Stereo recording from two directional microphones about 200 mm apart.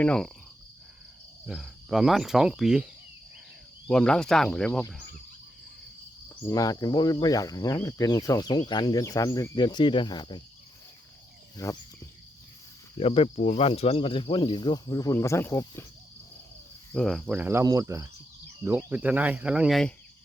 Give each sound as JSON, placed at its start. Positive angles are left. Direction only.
{"t": 0.0, "sound": "speech", "side_deg": 5}
{"t": 1.5, "sound": "speech", "side_deg": 0}
{"t": 3.8, "sound": "speech", "side_deg": 5}
{"t": 6.2, "sound": "speech", "side_deg": 15}
{"t": 11.5, "sound": "speech", "side_deg": 15}
{"t": 13.0, "sound": "speech", "side_deg": 30}
{"t": 16.9, "sound": "cricket", "side_deg": 0}